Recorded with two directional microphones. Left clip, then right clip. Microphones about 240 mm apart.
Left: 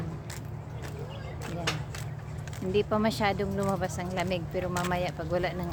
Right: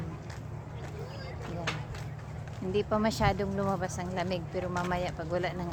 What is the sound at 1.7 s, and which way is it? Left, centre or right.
Vehicle, left.